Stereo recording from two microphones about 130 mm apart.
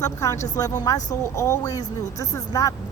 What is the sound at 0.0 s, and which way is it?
Speech, 25° left (ahead or behind).